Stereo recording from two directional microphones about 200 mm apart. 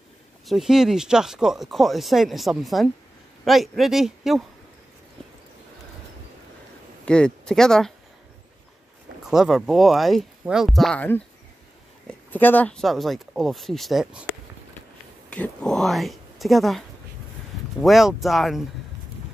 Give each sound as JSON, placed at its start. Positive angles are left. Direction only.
{"t": 0.5, "sound": "speech", "side_deg": 0}
{"t": 7.1, "sound": "speech", "side_deg": 5}
{"t": 9.2, "sound": "speech", "side_deg": 0}
{"t": 15.2, "sound": "speech", "side_deg": 5}
{"t": 17.8, "sound": "speech", "side_deg": 0}